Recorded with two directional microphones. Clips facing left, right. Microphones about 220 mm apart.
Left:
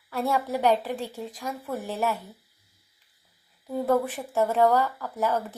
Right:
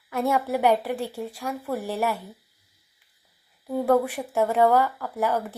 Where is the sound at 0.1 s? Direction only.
15° right (ahead or behind).